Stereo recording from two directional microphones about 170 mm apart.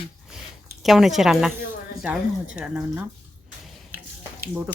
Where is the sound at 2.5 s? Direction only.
10° right (ahead or behind).